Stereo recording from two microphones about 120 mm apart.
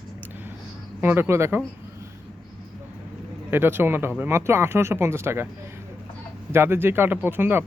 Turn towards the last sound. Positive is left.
turn(degrees=-15)  # may be behind; listen again after turning